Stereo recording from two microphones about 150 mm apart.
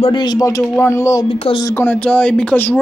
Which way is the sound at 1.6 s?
15° left (ahead or behind).